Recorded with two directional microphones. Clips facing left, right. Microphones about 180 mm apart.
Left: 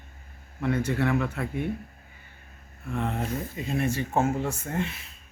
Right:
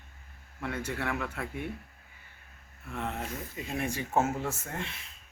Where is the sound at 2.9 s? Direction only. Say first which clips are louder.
Left 6 dB; 5° right (ahead or behind).